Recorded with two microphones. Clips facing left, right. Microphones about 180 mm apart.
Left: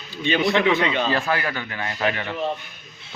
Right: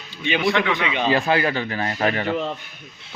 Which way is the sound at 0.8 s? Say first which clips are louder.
Right 1 dB; 15° right (ahead or behind).